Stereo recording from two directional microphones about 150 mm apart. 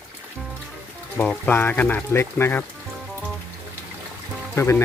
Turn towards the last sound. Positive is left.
turn(degrees=15)  # may be behind; listen again after turning